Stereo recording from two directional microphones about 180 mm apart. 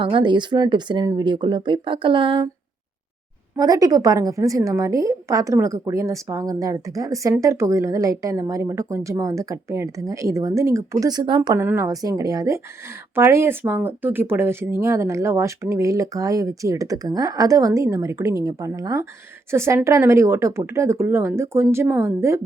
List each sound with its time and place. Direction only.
0.0 s speech: 25° right (ahead or behind)
3.6 s a woman's voice: 20° right (ahead or behind)
11.6 s a woman's voice: 15° right (ahead or behind)